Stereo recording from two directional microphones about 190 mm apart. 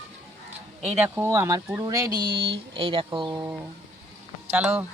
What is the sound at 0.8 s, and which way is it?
Speech, 10° right (ahead or behind).